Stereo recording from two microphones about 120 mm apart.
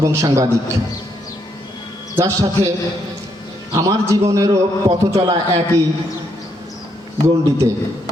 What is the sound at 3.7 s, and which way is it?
A man's voice, 25° right (ahead or behind).